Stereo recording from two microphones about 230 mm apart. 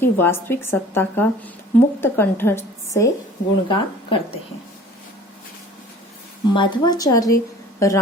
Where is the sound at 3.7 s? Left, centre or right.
Left.